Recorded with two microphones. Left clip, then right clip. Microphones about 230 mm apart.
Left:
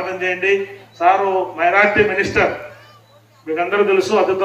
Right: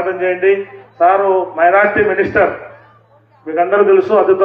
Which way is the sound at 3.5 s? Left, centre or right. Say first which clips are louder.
Right 5 dB; centre.